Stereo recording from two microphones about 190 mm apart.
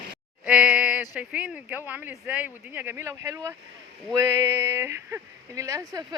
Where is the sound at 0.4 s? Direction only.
5° right (ahead or behind).